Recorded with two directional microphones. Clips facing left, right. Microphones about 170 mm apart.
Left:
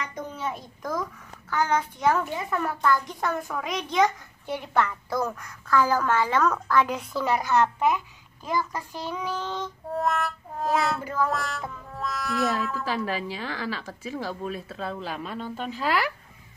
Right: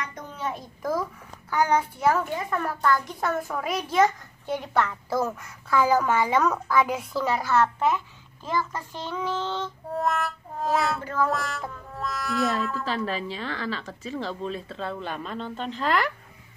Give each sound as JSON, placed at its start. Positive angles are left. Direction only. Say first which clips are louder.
{"t": 0.4, "sound": "a child's voice", "louder": "right 5 dB", "side_deg": 0}
{"t": 7.3, "sound": "speech", "louder": "left 1 dB", "side_deg": 15}
{"t": 9.8, "sound": "a child's voice", "louder": "left 1 dB", "side_deg": 0}